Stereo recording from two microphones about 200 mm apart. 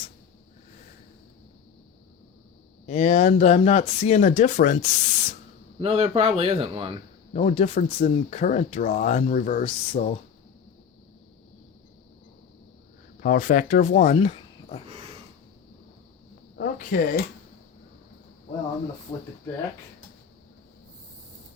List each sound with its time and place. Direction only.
2.8 s speech: 35° left (ahead or behind)
5.8 s speech: 30° right (ahead or behind)
7.3 s speech: 35° left (ahead or behind)
13.2 s speech: 40° left (ahead or behind)
16.6 s speech: 45° left (ahead or behind)